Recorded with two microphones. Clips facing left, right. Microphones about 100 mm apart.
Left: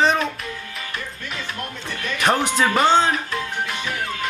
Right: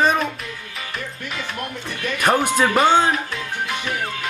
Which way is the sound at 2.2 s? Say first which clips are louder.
Right 1 dB; 10° right (ahead or behind).